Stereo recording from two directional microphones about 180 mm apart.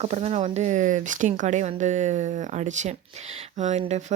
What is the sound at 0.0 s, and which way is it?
Speech, 35° right (ahead or behind).